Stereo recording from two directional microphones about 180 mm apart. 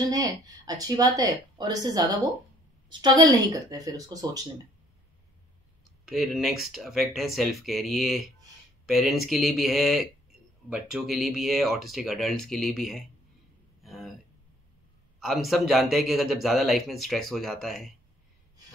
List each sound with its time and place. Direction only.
0.1 s speech: 20° right (ahead or behind)
6.0 s a man's voice: centre (ahead or behind)
13.8 s a sound: centre (ahead or behind)
15.1 s a man's voice: centre (ahead or behind)